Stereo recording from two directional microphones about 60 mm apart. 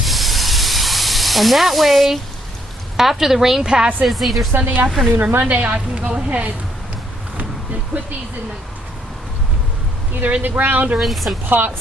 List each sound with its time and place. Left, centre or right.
0.0 s steam: centre
3.0 s a woman's voice: centre
4.0 s speech: centre
4.5 s a woman's voice: right
4.9 s speech: centre
5.5 s a woman's voice: right
10.4 s speech: right
11.0 s speech: centre
11.4 s speech: right